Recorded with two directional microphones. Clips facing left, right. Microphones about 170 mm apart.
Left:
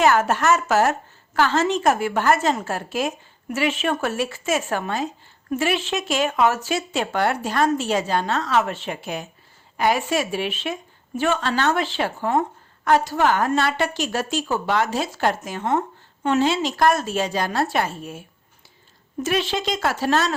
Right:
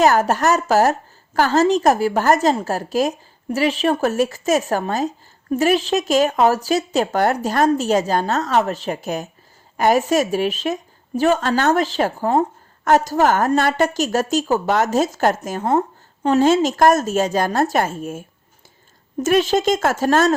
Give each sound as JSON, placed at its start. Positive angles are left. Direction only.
{"t": 0.0, "sound": "a woman's voice", "side_deg": -40}